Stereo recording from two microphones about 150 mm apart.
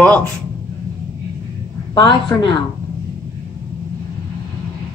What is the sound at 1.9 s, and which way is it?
Speech, 30° left (ahead or behind).